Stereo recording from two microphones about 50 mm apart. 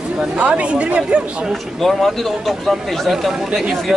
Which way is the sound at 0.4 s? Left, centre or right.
Right.